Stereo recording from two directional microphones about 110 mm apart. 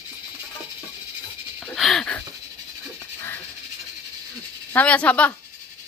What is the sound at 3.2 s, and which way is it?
Goat, 20° left (ahead or behind).